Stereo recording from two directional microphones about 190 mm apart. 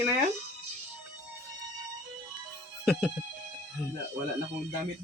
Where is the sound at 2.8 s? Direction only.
5° right (ahead or behind).